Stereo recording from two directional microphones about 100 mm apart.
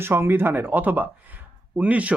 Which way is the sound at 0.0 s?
25° right (ahead or behind).